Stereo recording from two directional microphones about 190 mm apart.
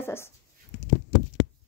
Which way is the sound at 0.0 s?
15° left (ahead or behind).